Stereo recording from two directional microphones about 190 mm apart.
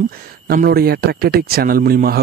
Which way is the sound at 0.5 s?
50° right (ahead or behind).